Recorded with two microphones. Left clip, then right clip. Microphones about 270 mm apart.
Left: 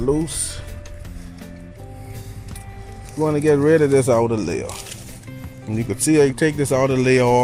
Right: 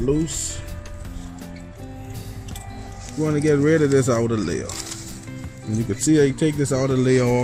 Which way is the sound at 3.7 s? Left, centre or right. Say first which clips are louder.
Left 3 dB; left.